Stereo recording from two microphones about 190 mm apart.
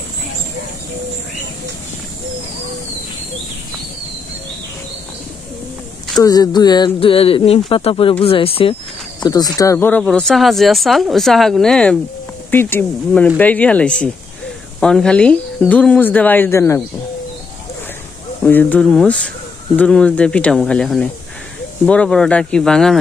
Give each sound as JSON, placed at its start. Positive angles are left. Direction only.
{"t": 6.1, "sound": "speech", "side_deg": 20}
{"t": 18.4, "sound": "speech", "side_deg": 10}